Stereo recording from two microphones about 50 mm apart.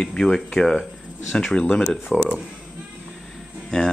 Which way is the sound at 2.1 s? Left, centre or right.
Left.